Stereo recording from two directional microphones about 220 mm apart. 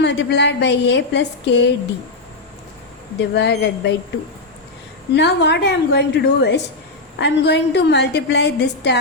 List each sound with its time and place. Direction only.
0.0 s a woman's voice: 50° left (ahead or behind)
3.2 s a woman's voice: 50° left (ahead or behind)
5.1 s a woman's voice: 50° left (ahead or behind)